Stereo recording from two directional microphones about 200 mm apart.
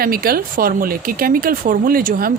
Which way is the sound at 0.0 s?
50° right (ahead or behind).